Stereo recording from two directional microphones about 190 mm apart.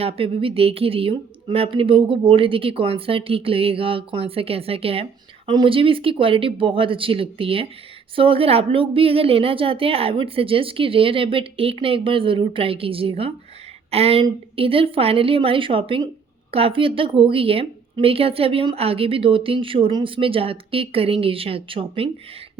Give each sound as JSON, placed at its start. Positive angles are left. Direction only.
{"t": 0.0, "sound": "a woman's voice", "side_deg": -30}